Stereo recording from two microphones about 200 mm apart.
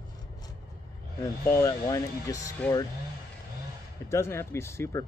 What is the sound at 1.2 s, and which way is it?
Speech, 15° left (ahead or behind).